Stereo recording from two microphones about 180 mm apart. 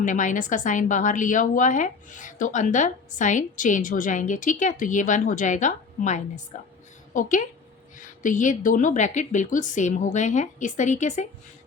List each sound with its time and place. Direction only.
0.0 s a woman's voice: 45° left (ahead or behind)